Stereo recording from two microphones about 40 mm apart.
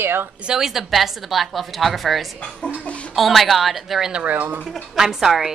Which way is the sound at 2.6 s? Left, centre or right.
Left.